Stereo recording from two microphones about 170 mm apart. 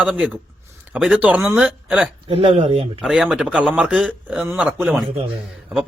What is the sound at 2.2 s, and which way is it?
Speech, 35° right (ahead or behind).